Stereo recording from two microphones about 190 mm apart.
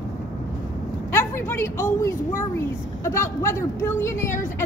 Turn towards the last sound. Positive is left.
turn(degrees=15)  # may be behind; listen again after turning